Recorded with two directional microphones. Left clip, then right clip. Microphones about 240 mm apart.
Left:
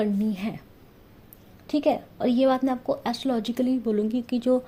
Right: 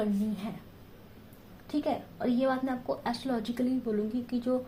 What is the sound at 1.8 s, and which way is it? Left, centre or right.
A woman's voice, left.